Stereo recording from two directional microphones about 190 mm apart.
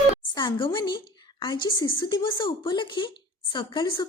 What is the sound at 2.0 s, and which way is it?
A woman's voice, 25° left (ahead or behind).